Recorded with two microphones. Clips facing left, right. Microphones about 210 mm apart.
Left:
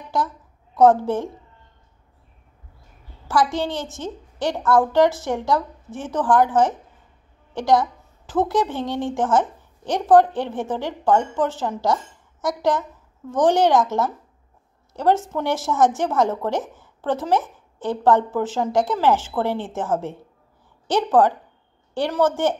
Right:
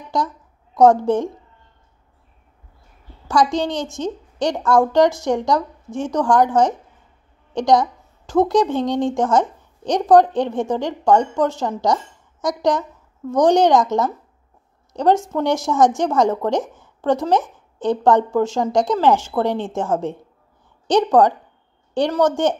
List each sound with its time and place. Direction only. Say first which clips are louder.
0.7 s a woman's voice: right 2 dB; 15° right (ahead or behind)
3.3 s a woman's voice: right 3 dB; 15° right (ahead or behind)
14.9 s a sound: right 3 dB; 15° right (ahead or behind)
15.3 s a woman's voice: right 4 dB; 15° right (ahead or behind)